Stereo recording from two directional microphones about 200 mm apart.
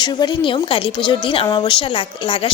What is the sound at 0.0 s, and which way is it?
A woman's voice, 20° left (ahead or behind).